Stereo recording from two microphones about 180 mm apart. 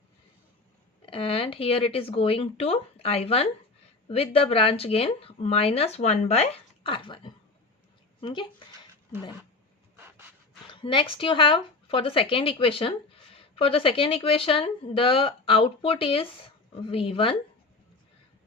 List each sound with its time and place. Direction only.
1.0 s speech: 30° left (ahead or behind)
10.7 s speech: 25° left (ahead or behind)